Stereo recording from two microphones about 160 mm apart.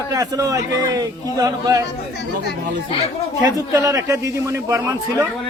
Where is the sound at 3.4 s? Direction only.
20° right (ahead or behind).